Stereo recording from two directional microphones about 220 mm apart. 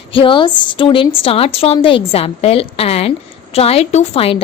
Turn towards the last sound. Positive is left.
turn(degrees=25)  # may be behind; listen again after turning